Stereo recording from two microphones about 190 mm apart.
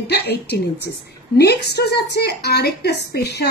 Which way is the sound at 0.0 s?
60° left (ahead or behind).